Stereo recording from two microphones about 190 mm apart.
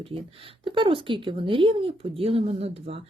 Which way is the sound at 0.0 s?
30° right (ahead or behind).